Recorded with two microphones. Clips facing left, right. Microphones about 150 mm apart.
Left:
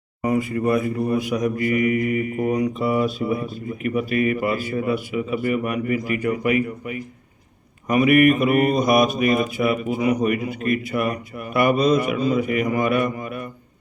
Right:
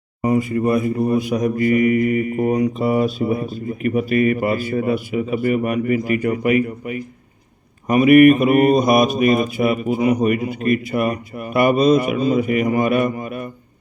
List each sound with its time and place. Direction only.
0.2 s speech: 30° right (ahead or behind)
7.9 s speech: 25° right (ahead or behind)